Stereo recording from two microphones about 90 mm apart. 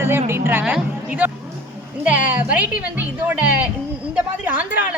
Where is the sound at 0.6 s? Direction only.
15° right (ahead or behind).